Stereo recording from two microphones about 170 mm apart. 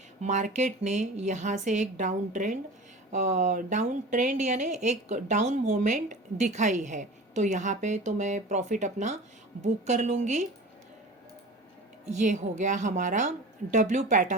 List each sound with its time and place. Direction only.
0.2 s speech: 45° right (ahead or behind)
12.0 s speech: 45° right (ahead or behind)